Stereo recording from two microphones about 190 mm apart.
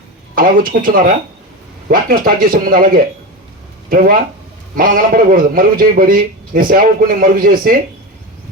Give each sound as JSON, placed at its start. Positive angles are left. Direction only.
{"t": 0.3, "sound": "a man's voice", "side_deg": -45}
{"t": 1.9, "sound": "a man's voice", "side_deg": -50}